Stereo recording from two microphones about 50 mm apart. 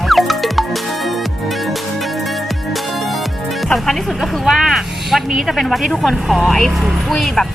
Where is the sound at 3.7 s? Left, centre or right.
Centre.